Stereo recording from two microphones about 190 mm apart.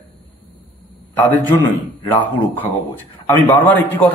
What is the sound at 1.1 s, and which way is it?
Speech, 10° left (ahead or behind).